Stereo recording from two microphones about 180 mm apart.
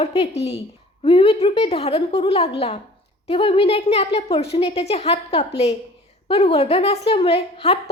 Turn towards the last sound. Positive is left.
turn(degrees=35)  # may be behind; listen again after turning